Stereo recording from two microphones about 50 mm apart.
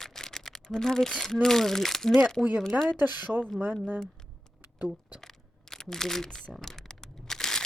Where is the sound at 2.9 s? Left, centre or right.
Right.